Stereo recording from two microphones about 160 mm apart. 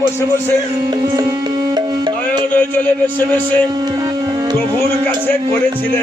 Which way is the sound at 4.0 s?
25° right (ahead or behind).